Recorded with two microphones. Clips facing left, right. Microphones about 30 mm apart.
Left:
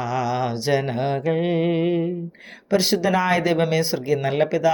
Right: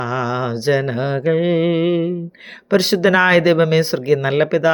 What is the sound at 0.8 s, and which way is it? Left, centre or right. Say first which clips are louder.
Speech: right 3 dB; right.